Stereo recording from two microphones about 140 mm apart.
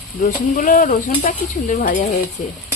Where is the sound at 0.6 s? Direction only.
75° left (ahead or behind).